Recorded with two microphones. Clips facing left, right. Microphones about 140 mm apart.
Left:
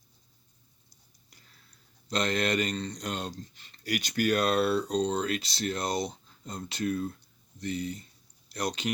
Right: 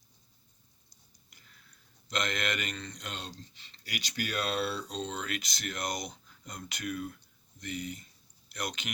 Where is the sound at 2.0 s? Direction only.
35° left (ahead or behind).